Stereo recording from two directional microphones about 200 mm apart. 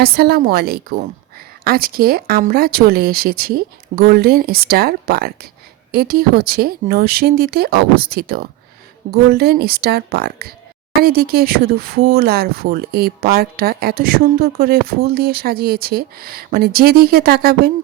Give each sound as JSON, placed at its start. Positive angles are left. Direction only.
{"t": 0.0, "sound": "speech", "side_deg": -50}